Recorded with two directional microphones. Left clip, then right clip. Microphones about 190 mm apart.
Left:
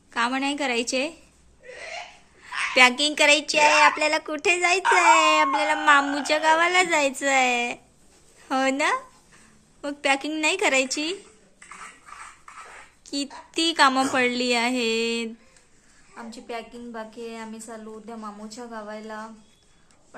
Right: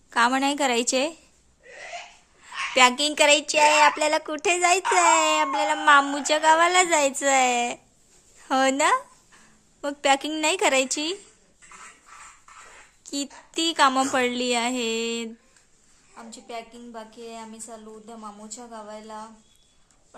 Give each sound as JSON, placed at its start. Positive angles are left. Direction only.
{"t": 0.1, "sound": "a woman's voice", "side_deg": -30}
{"t": 2.7, "sound": "a woman's voice", "side_deg": -20}
{"t": 13.0, "sound": "a sound", "side_deg": -25}
{"t": 13.5, "sound": "a woman's voice", "side_deg": -20}
{"t": 16.1, "sound": "a woman's voice", "side_deg": 0}